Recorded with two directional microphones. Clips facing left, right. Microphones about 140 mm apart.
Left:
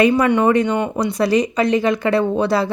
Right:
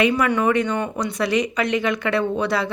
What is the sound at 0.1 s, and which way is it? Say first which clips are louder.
Speech: left 4 dB; 25° left (ahead or behind).